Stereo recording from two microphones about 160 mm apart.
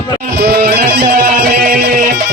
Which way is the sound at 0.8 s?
60° right (ahead or behind).